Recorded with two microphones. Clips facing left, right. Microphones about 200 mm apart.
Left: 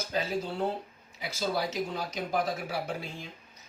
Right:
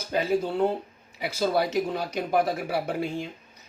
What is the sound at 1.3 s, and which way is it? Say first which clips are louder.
Speech: right 7 dB; 60° right (ahead or behind).